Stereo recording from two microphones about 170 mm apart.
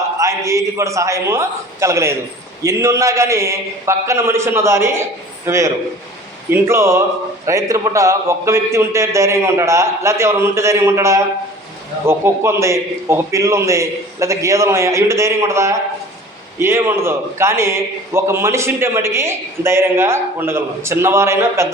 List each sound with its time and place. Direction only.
0.2 s a man's voice: 20° right (ahead or behind)